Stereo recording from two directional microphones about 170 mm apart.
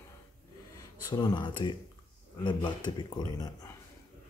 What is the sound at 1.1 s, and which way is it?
Speech, 25° left (ahead or behind).